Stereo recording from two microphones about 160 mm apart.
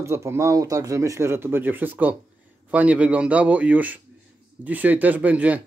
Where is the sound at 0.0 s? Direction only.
15° right (ahead or behind).